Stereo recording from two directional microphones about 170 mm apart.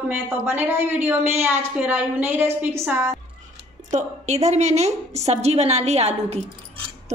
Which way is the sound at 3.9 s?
40° right (ahead or behind).